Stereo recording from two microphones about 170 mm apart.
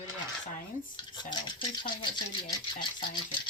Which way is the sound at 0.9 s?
25° left (ahead or behind).